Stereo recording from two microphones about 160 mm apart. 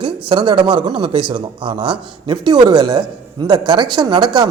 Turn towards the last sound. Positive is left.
turn(degrees=-25)  # may be behind; listen again after turning